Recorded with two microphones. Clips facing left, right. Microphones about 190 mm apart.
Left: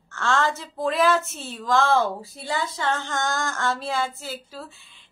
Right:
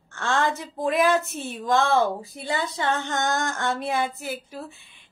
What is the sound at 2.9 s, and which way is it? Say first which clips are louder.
Female singing: right 2 dB; 20° right (ahead or behind).